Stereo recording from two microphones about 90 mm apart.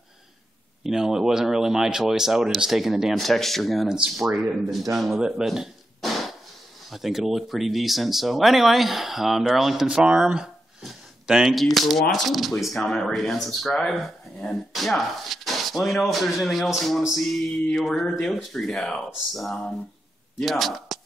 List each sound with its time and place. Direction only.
0.8 s speech: 5° right (ahead or behind)
4.9 s a sound: centre (ahead or behind)
6.9 s speech: 5° right (ahead or behind)
18.0 s speech: 15° left (ahead or behind)
18.3 s speech: 5° left (ahead or behind)